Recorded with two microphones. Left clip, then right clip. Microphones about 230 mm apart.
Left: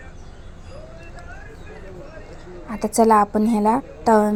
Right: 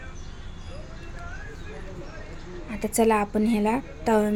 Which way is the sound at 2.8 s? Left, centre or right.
Centre.